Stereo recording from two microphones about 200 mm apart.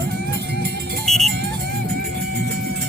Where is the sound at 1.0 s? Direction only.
Centre (ahead or behind).